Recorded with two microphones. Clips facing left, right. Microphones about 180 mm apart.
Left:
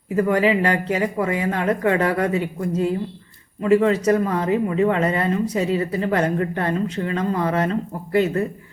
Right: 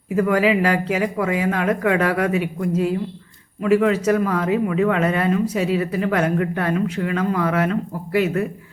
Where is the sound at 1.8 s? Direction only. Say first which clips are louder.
Left 1 dB; 90° right.